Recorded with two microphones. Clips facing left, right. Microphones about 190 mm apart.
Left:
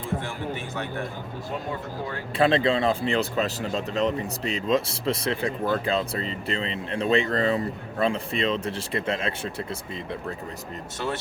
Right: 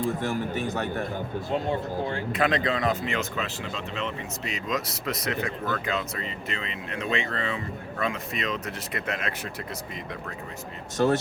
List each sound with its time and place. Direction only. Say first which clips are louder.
0.0 s a man's voice: right 3 dB; 40° right (ahead or behind)
2.3 s speech: left 6 dB; 30° left (ahead or behind)
10.9 s a man's voice: right 8 dB; 40° right (ahead or behind)